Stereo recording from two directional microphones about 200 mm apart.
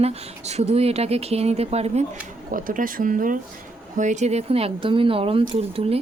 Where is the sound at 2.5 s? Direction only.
45° right (ahead or behind).